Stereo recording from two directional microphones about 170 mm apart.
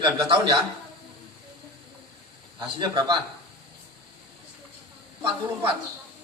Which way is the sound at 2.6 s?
25° right (ahead or behind).